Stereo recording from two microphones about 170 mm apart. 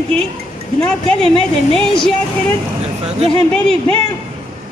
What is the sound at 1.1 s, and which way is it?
Speech, 5° left (ahead or behind).